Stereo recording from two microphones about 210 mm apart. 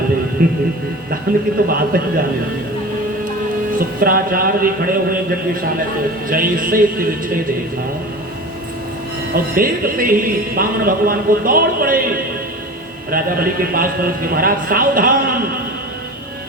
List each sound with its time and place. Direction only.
1.3 s speech: 45° right (ahead or behind)
3.7 s speech: 45° right (ahead or behind)
6.2 s speech: 40° right (ahead or behind)
9.3 s speech: 45° right (ahead or behind)